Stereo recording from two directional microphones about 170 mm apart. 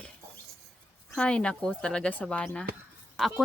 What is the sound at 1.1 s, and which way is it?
Speech, 5° left (ahead or behind).